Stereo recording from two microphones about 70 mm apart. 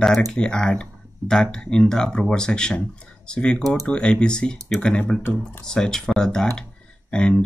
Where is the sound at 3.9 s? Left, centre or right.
Centre.